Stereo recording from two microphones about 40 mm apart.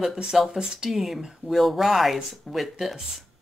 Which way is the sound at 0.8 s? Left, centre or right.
Centre.